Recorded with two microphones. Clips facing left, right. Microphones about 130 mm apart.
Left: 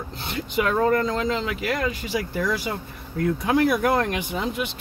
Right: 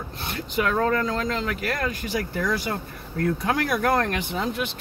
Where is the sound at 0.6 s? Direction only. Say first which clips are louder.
Left 2 dB; 10° left (ahead or behind).